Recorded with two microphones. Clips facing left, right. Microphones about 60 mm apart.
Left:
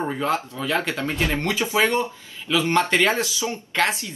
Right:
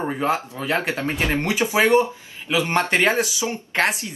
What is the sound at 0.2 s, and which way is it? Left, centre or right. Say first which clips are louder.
Speech: right 1 dB; right.